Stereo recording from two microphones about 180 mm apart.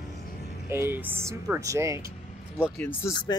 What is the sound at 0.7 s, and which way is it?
Speech, 15° right (ahead or behind).